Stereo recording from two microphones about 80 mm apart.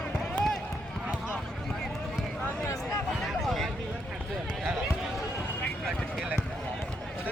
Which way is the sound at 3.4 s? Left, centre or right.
Centre.